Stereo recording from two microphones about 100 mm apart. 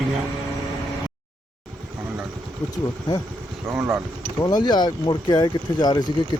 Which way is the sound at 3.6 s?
25° right (ahead or behind).